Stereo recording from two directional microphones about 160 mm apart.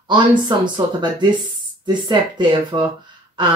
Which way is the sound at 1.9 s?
30° right (ahead or behind).